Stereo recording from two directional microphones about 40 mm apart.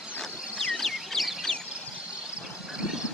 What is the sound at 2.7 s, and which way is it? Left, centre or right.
Vehicle, centre.